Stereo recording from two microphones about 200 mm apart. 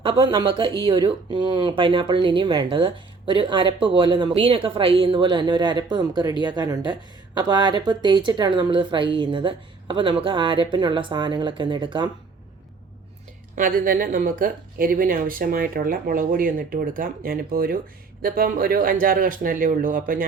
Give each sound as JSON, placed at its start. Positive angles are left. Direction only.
{"t": 0.0, "sound": "speech", "side_deg": -25}
{"t": 13.6, "sound": "speech", "side_deg": -45}